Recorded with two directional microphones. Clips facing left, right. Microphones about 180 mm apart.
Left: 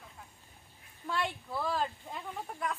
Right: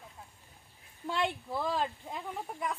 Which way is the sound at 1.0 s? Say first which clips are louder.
Right 2 dB; 20° right (ahead or behind).